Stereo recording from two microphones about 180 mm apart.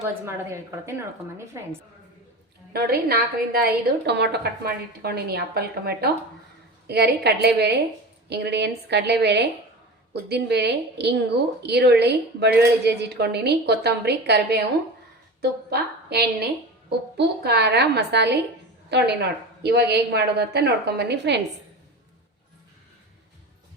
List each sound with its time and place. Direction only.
0.1 s a woman's voice: 15° right (ahead or behind)
2.7 s a woman's voice: 60° right (ahead or behind)